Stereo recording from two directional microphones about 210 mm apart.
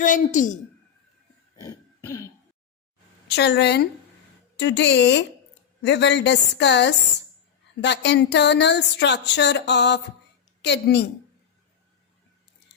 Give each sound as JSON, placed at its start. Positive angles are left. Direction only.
{"t": 0.0, "sound": "a woman's voice", "side_deg": 40}
{"t": 1.6, "sound": "throat clearing", "side_deg": 15}
{"t": 3.2, "sound": "a woman's voice", "side_deg": 50}
{"t": 4.5, "sound": "a sound", "side_deg": 55}
{"t": 10.6, "sound": "a woman's voice", "side_deg": 55}